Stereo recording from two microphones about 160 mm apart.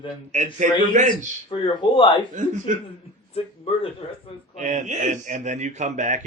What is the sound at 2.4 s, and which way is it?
Speech, 50° right (ahead or behind).